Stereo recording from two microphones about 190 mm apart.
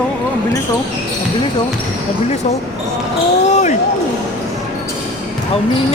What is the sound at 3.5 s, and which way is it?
Basketball bounce, 40° left (ahead or behind).